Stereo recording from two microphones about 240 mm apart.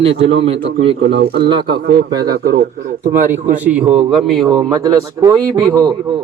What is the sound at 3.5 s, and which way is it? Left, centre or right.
A man's voice, right.